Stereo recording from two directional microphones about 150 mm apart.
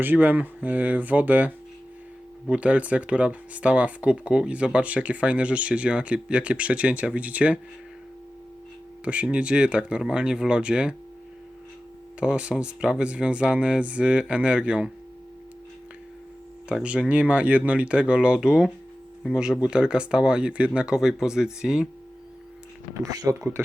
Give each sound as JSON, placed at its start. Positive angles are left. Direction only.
{"t": 0.0, "sound": "speech", "side_deg": -10}
{"t": 9.0, "sound": "speech", "side_deg": -10}
{"t": 12.2, "sound": "speech", "side_deg": -5}
{"t": 16.6, "sound": "speech", "side_deg": -5}
{"t": 23.1, "sound": "speech", "side_deg": -20}